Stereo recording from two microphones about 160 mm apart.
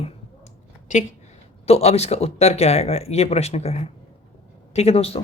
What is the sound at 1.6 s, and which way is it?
Speech, 40° left (ahead or behind).